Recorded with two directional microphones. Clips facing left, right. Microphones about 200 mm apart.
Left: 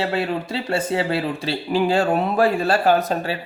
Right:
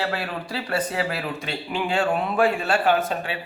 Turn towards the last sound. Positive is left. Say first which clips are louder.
# left 3 dB
turn(degrees=40)  # may be behind; listen again after turning